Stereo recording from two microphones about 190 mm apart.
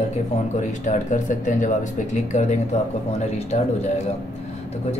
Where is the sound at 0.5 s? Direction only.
40° left (ahead or behind).